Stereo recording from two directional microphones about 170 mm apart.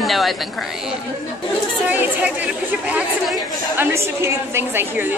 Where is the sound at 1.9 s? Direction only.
10° right (ahead or behind).